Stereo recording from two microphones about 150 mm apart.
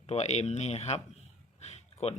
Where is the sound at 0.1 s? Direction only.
45° left (ahead or behind).